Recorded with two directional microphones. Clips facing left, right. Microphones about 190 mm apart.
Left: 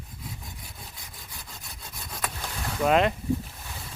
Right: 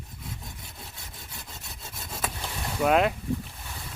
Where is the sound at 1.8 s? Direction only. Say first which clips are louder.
Right 1 dB; 5° right (ahead or behind).